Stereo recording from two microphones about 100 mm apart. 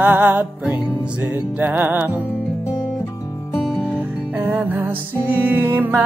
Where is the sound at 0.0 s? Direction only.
20° right (ahead or behind).